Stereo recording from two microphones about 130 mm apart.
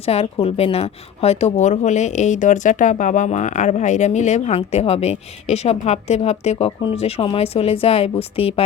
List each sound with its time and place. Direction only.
0.0 s a woman's voice: 50° left (ahead or behind)